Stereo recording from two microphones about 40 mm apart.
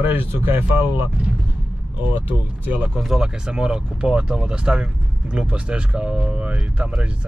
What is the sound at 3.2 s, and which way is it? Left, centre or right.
A man's voice, right.